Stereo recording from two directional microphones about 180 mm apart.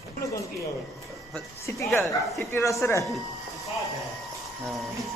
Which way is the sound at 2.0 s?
15° left (ahead or behind).